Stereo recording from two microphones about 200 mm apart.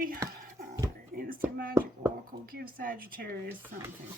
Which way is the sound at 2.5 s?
45° right (ahead or behind).